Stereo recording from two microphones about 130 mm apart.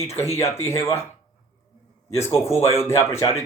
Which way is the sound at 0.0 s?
20° left (ahead or behind).